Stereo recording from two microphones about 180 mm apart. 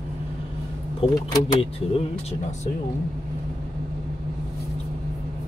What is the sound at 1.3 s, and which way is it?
Speech, 25° left (ahead or behind).